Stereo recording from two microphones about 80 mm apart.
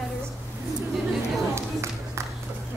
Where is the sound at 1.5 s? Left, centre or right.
Right.